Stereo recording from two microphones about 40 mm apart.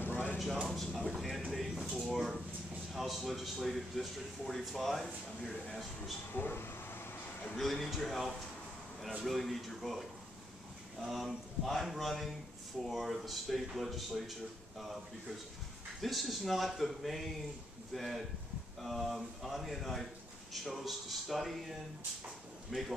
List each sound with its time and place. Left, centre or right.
0.1 s a sound: left
0.7 s a sound: centre
2.1 s a man's voice: centre
6.3 s speech: left
7.5 s a man's voice: centre
16.0 s a man's voice: centre